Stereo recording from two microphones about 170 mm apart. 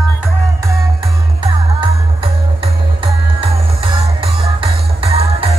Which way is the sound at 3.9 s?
30° right (ahead or behind).